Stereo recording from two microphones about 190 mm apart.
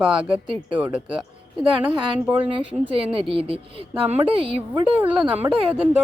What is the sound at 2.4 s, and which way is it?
A woman's voice, 25° right (ahead or behind).